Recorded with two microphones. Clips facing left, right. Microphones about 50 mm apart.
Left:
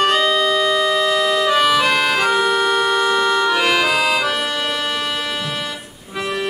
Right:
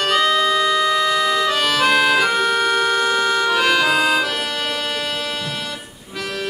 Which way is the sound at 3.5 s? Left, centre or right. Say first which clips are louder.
Even; left.